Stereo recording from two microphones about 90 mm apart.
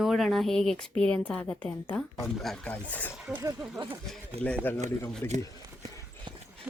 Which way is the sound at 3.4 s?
40° right (ahead or behind).